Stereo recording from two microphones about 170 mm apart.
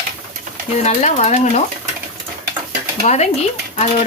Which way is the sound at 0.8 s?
40° left (ahead or behind).